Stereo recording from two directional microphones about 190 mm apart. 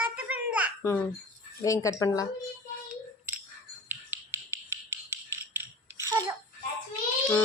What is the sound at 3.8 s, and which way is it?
Frog, 15° right (ahead or behind).